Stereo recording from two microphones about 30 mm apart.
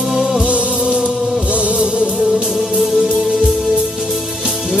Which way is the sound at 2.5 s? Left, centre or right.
Centre.